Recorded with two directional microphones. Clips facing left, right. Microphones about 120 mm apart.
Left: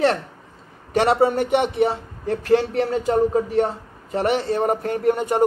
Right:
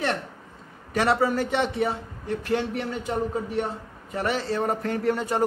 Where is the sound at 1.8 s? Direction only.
35° left (ahead or behind).